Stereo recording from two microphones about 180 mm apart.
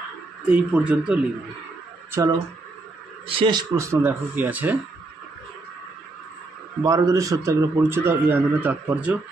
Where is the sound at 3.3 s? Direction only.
25° right (ahead or behind); by 4.8 s 10° right (ahead or behind).